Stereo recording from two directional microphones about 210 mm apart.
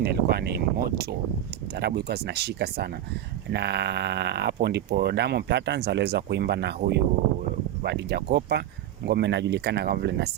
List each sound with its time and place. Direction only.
0.0 s speech: 50° right (ahead or behind)